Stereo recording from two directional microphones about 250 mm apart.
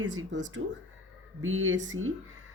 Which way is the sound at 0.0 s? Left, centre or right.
Right.